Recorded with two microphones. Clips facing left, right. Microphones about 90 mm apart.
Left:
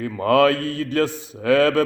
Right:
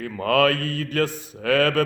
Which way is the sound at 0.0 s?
25° left (ahead or behind).